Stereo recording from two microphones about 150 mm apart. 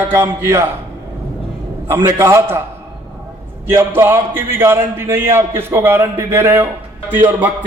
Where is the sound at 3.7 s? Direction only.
15° right (ahead or behind).